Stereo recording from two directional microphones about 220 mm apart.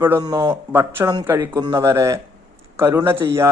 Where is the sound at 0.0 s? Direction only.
15° right (ahead or behind).